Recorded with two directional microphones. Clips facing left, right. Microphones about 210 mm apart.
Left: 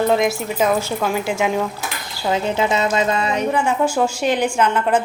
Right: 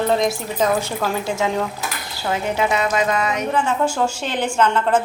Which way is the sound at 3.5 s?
10° left (ahead or behind).